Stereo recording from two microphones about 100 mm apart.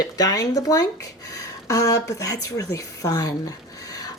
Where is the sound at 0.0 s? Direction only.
40° left (ahead or behind).